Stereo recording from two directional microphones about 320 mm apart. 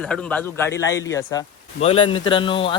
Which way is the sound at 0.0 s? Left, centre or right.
Centre.